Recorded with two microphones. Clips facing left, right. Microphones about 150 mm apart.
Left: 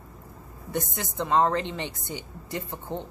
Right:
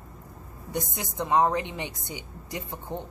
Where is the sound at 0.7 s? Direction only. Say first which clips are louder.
Left 1 dB; 15° right (ahead or behind).